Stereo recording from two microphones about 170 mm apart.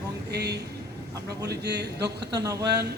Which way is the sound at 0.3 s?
75° right (ahead or behind).